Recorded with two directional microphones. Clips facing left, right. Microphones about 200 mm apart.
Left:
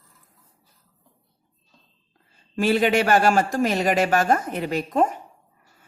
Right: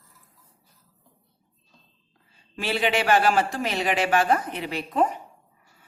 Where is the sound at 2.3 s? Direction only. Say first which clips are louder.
Left 8 dB; 45° left (ahead or behind).